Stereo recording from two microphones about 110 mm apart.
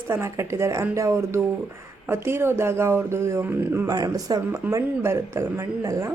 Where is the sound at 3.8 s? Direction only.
35° right (ahead or behind).